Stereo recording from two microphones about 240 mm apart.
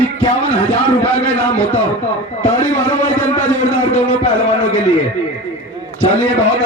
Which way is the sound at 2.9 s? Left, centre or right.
Left.